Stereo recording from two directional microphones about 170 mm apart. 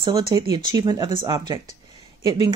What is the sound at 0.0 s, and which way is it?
A woman's voice, 25° right (ahead or behind).